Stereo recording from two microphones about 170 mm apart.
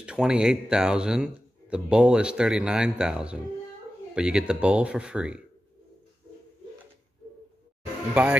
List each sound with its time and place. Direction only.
0.0 s speech: 5° right (ahead or behind)
8.1 s speech: 10° right (ahead or behind)